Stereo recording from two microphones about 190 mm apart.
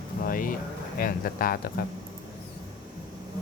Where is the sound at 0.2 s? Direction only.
45° left (ahead or behind).